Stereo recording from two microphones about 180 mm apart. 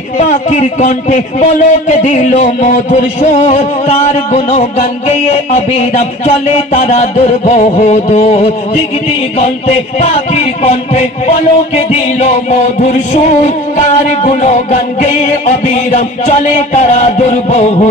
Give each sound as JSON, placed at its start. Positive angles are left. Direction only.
{"t": 0.2, "sound": "music", "side_deg": 40}